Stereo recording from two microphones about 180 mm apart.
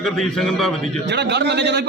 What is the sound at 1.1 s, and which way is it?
Speech, 70° right (ahead or behind).